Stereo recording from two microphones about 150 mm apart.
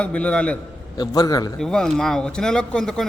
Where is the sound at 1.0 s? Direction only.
25° left (ahead or behind).